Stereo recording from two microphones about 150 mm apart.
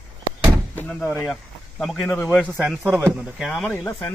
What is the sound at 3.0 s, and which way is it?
Speech, 10° right (ahead or behind).